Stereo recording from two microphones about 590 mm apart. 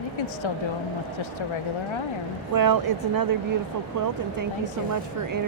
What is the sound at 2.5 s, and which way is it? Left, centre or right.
Speech, right.